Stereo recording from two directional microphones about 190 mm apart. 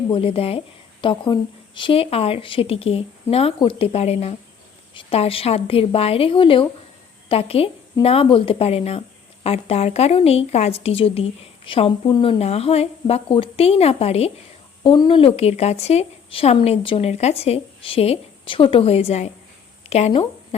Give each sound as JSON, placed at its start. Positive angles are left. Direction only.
{"t": 0.1, "sound": "a woman's voice", "side_deg": 30}